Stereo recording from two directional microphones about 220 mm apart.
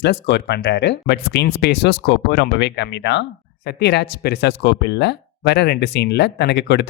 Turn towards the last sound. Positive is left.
turn(degrees=50)  # may be behind; listen again after turning